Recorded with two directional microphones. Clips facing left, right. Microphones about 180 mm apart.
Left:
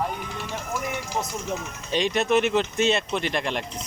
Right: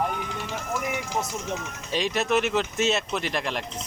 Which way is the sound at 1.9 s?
Centre (ahead or behind).